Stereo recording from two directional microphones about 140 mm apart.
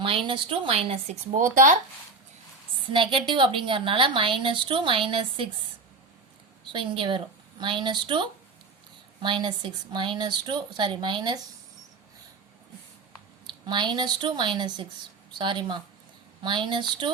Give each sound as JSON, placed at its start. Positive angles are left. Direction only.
{"t": 0.0, "sound": "a woman's voice", "side_deg": -40}
{"t": 2.9, "sound": "a woman's voice", "side_deg": -40}
{"t": 6.7, "sound": "a woman's voice", "side_deg": -35}
{"t": 13.5, "sound": "a woman's voice", "side_deg": -35}